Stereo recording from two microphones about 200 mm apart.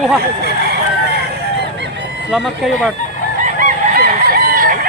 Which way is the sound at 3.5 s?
50° right (ahead or behind).